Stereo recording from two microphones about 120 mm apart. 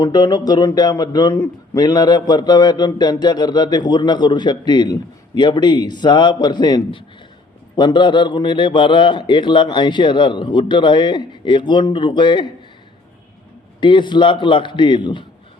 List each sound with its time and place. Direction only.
0.0 s speech: 35° left (ahead or behind)
13.8 s speech: 40° left (ahead or behind)